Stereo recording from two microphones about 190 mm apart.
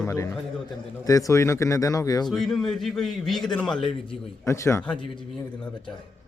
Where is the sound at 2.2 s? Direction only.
Centre (ahead or behind).